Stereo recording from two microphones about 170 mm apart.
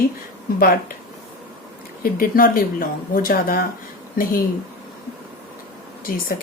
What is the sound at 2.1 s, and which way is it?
A woman's voice, 55° left (ahead or behind).